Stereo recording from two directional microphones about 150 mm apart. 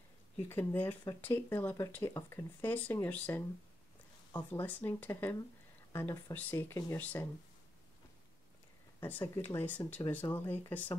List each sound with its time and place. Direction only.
0.5 s speech: 15° left (ahead or behind)
4.5 s speech: 10° left (ahead or behind)
9.0 s speech: 15° left (ahead or behind)